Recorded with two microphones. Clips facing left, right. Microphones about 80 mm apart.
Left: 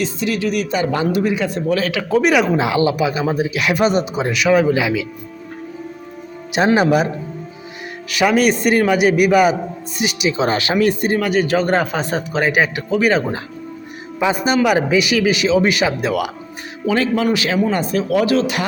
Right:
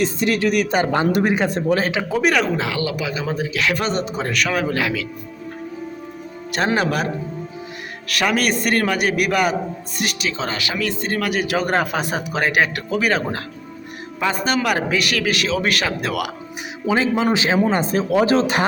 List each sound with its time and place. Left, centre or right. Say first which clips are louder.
0.0 s speech: right 1 dB; right
1.6 s speech: left 1 dB; right
2.0 s speech: left 6 dB; centre
2.3 s speech: left 4 dB; centre
2.6 s speech: left 7 dB; left; by 5.0 s centre
6.5 s speech: left 6 dB; centre
10.2 s speech: left 9 dB; centre
10.5 s speech: left 8 dB; left
11.2 s speech: left 4 dB; centre
16.8 s speech: left 1 dB; right